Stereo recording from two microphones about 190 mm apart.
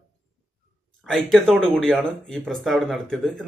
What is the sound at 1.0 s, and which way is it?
Speech, centre (ahead or behind).